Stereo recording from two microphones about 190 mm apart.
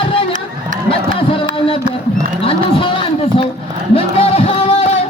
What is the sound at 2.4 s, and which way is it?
Livestock, 25° left (ahead or behind).